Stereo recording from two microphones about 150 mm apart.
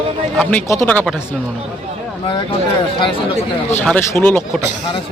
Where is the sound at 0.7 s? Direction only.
20° left (ahead or behind).